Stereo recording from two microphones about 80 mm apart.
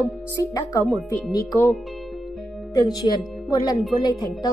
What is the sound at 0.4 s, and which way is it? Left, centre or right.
Speech, left.